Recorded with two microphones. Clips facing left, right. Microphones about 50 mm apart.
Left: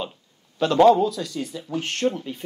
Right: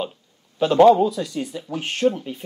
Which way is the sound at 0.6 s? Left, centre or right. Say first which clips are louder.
Right 2 dB; centre.